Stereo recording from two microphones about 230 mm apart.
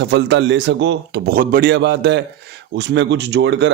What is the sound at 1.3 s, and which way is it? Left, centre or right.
A man's voice, right.